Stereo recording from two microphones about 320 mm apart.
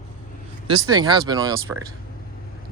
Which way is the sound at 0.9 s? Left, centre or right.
Centre.